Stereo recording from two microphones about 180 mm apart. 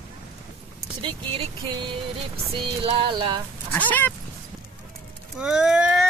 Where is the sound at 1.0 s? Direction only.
30° right (ahead or behind).